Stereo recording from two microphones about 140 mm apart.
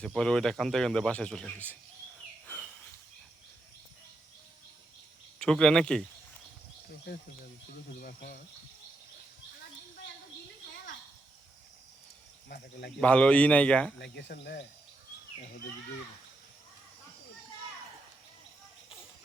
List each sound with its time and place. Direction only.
0.0 s speech: 5° left (ahead or behind)
2.5 s a sound: 15° left (ahead or behind)
5.4 s speech: 5° left (ahead or behind)
7.9 s speech: 90° left
13.0 s speech: 10° left (ahead or behind)